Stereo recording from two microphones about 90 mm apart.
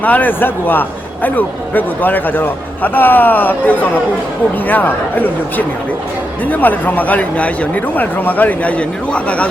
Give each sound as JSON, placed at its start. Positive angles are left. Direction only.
{"t": 0.0, "sound": "a man's voice", "side_deg": 20}